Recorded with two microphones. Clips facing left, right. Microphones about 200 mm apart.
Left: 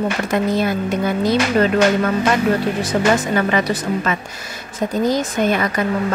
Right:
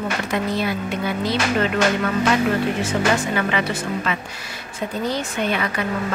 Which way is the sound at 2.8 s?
40° left (ahead or behind).